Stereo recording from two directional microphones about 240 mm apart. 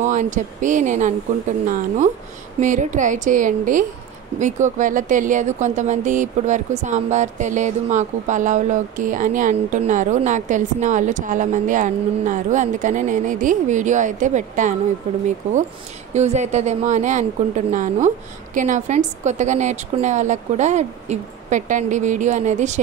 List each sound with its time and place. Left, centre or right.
0.0 s speech: right
2.6 s speech: right
16.1 s a woman's voice: right